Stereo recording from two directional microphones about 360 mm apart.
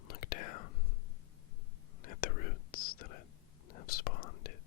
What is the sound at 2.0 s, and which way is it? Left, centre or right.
Whispering, left.